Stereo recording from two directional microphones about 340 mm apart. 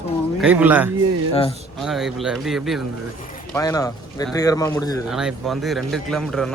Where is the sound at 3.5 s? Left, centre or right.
Centre.